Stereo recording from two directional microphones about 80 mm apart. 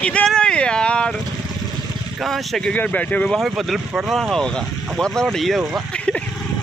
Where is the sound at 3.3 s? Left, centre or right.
Centre.